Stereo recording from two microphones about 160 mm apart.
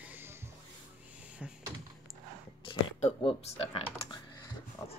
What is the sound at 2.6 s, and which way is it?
Speech, 40° left (ahead or behind).